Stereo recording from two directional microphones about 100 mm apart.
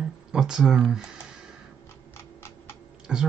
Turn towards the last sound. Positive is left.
turn(degrees=-10)  # may be behind; listen again after turning